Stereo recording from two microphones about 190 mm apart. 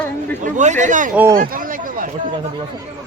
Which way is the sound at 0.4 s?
40° right (ahead or behind).